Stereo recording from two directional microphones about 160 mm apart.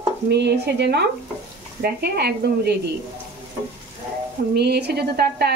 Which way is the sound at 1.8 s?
75° right (ahead or behind).